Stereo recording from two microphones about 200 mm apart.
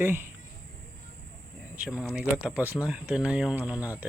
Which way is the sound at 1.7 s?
5° right (ahead or behind).